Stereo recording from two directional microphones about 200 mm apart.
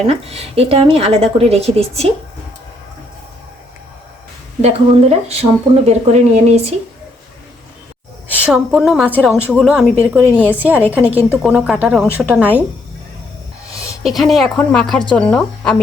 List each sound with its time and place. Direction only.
0.1 s speech: 30° right (ahead or behind)
4.6 s speech: 30° right (ahead or behind)
8.4 s a woman's voice: 5° right (ahead or behind)
14.0 s a woman's voice: centre (ahead or behind)